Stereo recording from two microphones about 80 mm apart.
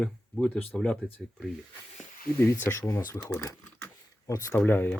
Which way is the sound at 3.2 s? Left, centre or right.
Left.